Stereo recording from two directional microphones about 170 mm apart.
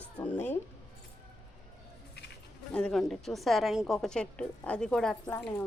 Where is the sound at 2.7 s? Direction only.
5° left (ahead or behind).